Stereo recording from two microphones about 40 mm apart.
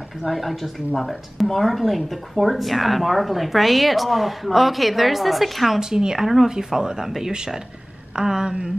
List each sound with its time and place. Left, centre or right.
0.3 s speech: centre
5.8 s speech: centre
6.5 s speech: centre
8.2 s a sound: centre